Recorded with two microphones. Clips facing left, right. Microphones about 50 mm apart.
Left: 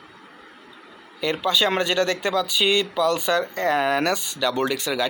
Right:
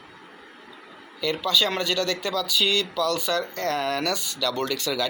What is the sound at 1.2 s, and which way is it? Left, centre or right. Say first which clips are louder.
Speech: left 2 dB; left.